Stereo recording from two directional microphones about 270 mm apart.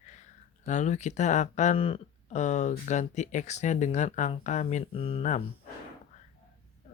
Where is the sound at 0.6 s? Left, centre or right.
Left.